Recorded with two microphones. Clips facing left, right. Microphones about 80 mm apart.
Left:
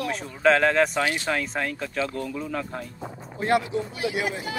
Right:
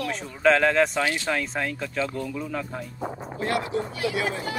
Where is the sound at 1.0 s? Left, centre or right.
Left.